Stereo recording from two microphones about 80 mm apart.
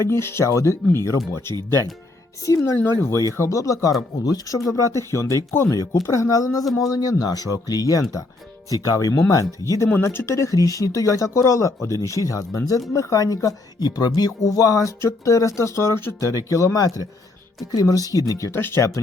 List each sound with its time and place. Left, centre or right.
0.0 s speech: left
9.9 s speech: left
18.5 s speech: left